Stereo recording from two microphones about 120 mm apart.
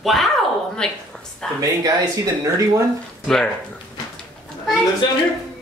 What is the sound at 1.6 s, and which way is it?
Speech, 30° right (ahead or behind).